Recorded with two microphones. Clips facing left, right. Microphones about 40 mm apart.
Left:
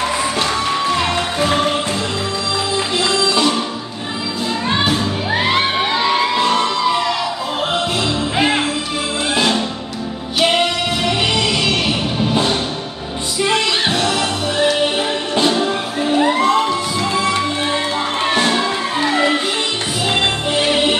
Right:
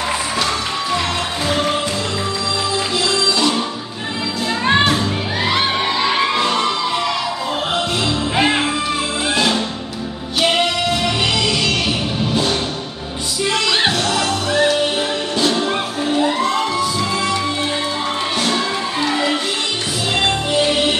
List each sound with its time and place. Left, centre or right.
1.4 s music: left
3.3 s music: centre
5.3 s children shouting: left
6.3 s music: centre
15.4 s music: centre
16.2 s music: left
18.4 s music: left
20.1 s music: centre